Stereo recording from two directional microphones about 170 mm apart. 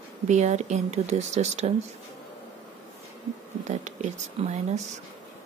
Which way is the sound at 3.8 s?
40° right (ahead or behind).